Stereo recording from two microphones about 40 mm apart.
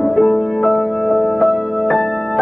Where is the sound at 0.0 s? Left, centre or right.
Centre.